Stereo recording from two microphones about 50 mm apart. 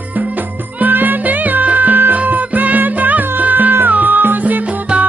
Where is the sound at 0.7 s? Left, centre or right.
Right.